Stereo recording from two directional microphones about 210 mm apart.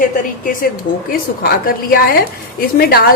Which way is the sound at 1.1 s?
45° left (ahead or behind).